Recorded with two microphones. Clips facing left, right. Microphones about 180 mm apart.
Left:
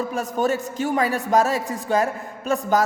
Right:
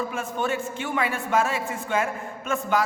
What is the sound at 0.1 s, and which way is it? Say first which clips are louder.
A man's voice: left 5 dB; 40° left (ahead or behind).